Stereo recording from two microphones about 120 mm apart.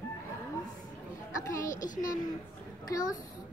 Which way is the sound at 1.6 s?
90° left.